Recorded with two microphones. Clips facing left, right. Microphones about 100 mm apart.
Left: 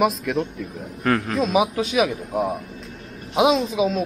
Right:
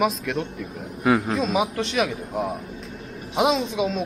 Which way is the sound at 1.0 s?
10° right (ahead or behind).